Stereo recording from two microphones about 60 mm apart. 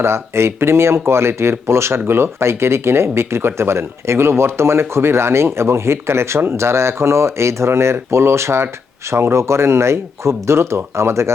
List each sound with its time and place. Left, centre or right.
0.0 s speech: right